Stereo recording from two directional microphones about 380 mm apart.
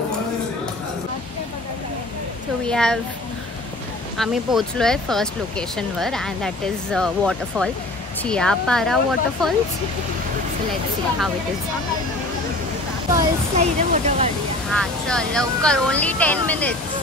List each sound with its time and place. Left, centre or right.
2.6 s speech: centre
4.2 s speech: centre
13.1 s speech: centre
14.7 s speech: centre